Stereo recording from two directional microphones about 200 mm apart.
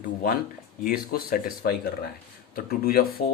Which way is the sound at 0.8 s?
45° left (ahead or behind).